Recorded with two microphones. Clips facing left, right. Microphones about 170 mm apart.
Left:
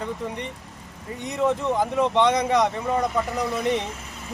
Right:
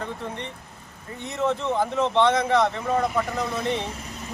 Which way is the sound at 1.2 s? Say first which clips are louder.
Left 2 dB; 15° left (ahead or behind).